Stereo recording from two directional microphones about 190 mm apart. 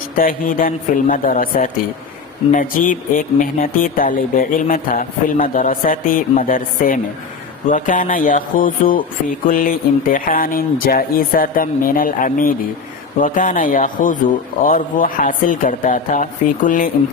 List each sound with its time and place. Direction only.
0.2 s speech: 45° left (ahead or behind)